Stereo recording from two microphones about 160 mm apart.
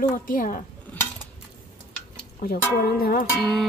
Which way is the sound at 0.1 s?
55° left (ahead or behind).